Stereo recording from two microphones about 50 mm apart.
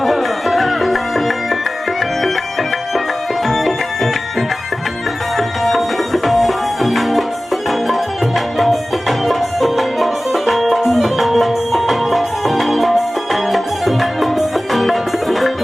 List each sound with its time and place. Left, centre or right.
0.0 s music: centre
3.4 s tabla: centre
6.2 s music: centre